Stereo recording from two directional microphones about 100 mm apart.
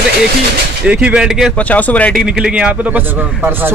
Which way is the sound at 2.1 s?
5° right (ahead or behind).